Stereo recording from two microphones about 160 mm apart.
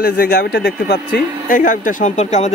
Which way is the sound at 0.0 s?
70° left (ahead or behind).